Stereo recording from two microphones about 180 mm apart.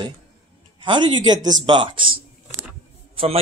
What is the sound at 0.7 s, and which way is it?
A man's voice, 25° right (ahead or behind).